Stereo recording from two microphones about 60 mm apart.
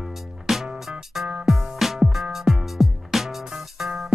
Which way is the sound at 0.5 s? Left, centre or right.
Centre.